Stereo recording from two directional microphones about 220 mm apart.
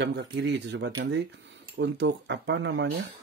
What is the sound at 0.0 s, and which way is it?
Speech, 55° right (ahead or behind).